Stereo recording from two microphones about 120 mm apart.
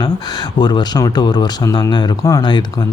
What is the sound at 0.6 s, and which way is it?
A man's voice, 35° left (ahead or behind).